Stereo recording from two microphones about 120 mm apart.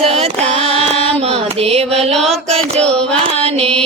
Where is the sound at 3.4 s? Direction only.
55° right (ahead or behind).